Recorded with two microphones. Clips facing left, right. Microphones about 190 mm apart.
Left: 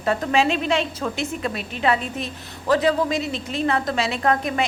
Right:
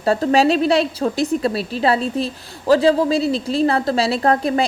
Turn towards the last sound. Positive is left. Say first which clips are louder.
# right 5 dB
turn(degrees=-35)  # may be behind; listen again after turning